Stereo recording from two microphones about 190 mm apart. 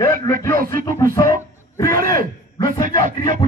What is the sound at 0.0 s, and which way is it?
Music, 15° left (ahead or behind).